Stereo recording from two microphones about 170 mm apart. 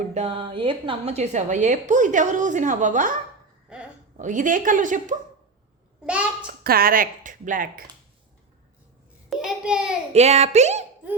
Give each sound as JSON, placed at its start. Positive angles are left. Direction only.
{"t": 0.0, "sound": "a woman's voice", "side_deg": -40}
{"t": 4.2, "sound": "a woman's voice", "side_deg": -50}
{"t": 6.5, "sound": "speech", "side_deg": -60}
{"t": 9.3, "sound": "a child's voice", "side_deg": -5}
{"t": 10.1, "sound": "speech", "side_deg": -40}